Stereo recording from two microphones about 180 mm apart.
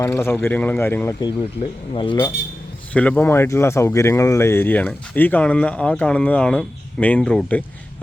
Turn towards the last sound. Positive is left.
turn(degrees=5)  # may be behind; listen again after turning